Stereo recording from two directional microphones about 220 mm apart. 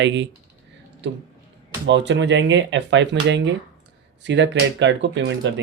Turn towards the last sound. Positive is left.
turn(degrees=-55)  # may be behind; listen again after turning